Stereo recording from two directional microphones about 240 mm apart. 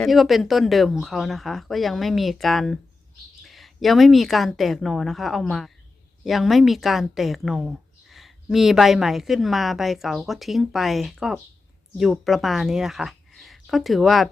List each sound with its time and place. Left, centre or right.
0.0 s a woman's voice: centre